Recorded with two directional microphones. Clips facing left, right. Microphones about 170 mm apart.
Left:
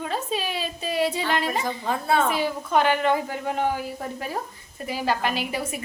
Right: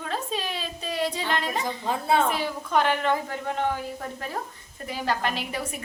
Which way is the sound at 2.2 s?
Centre (ahead or behind).